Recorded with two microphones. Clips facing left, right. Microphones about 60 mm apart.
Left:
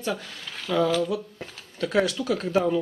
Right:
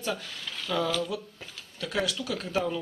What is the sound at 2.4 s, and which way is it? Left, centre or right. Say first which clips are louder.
Speech: left 6 dB; centre.